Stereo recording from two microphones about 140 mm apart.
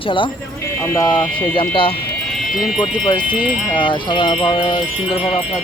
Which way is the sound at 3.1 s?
35° left (ahead or behind).